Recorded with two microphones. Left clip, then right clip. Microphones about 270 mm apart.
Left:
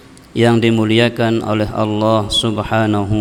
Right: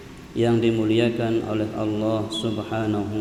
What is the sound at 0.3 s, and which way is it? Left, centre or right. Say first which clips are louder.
A man's voice: left 7 dB; left.